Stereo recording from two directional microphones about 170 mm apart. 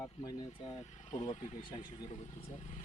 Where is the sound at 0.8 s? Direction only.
45° left (ahead or behind).